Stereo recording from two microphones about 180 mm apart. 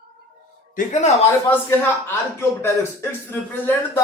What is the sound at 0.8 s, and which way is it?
Speech, 40° left (ahead or behind).